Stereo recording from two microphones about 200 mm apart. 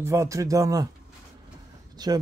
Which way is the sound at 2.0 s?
20° right (ahead or behind).